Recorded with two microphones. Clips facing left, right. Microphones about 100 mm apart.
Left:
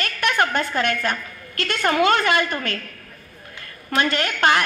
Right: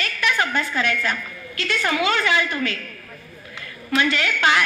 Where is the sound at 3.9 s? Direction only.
50° left (ahead or behind).